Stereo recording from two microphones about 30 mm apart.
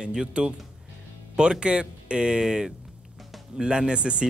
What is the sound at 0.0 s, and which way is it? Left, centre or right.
Speech, right.